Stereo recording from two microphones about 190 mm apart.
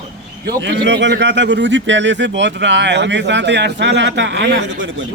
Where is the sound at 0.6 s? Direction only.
65° right (ahead or behind).